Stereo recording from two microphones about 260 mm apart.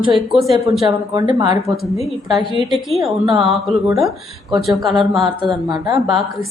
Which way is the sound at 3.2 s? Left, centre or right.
Centre.